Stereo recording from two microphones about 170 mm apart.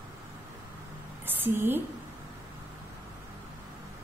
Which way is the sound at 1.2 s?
10° right (ahead or behind).